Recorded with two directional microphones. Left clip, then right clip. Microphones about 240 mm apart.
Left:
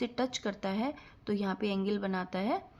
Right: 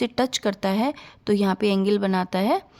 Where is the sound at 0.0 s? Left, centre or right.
Right.